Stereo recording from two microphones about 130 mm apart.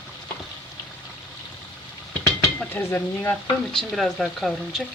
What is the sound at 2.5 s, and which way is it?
Stir, 15° left (ahead or behind).